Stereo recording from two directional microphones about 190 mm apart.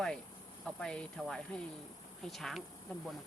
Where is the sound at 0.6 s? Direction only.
5° left (ahead or behind).